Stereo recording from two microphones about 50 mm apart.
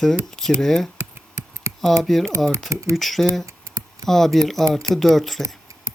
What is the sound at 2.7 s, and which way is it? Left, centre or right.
Speech, right.